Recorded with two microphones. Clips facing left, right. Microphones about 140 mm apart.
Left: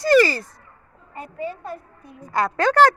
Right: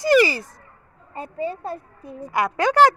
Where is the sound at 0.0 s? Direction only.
15° right (ahead or behind).